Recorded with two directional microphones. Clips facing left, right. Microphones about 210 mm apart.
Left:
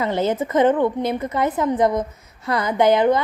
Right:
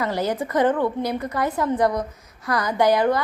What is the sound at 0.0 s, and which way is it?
A woman's voice, 20° left (ahead or behind).